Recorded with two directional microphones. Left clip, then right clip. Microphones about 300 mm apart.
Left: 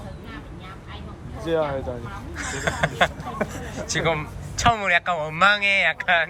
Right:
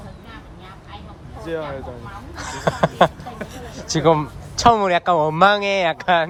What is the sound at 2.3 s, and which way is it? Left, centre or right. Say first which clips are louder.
Speech: right 3 dB; centre.